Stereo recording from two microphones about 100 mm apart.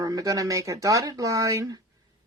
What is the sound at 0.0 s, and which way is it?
Speech, 35° right (ahead or behind).